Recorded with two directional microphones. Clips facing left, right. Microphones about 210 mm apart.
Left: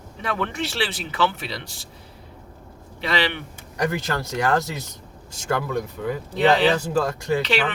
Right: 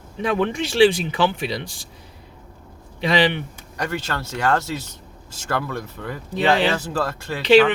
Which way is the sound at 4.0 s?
15° left (ahead or behind).